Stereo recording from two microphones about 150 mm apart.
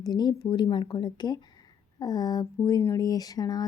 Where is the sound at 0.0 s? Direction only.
30° left (ahead or behind).